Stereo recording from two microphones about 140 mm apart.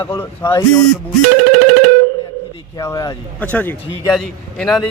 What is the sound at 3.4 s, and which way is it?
A man's voice, 10° left (ahead or behind).